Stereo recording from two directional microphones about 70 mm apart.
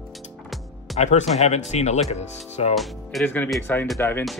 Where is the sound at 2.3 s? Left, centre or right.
Centre.